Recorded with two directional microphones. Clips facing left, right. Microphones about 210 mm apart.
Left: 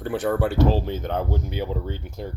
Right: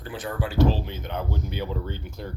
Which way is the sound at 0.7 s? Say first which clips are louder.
Left 5 dB; 45° left (ahead or behind).